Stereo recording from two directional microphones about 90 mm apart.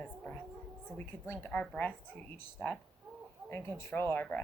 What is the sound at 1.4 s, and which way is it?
Speech, 20° left (ahead or behind).